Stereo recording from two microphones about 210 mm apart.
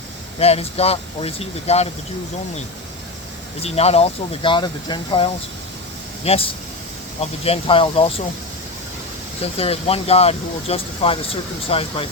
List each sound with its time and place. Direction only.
0.3 s speech: 30° left (ahead or behind)
3.6 s speech: 30° left (ahead or behind)
9.6 s speech: 30° left (ahead or behind)